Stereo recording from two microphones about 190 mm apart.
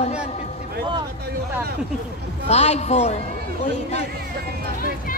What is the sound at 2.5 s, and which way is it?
Music, 35° left (ahead or behind).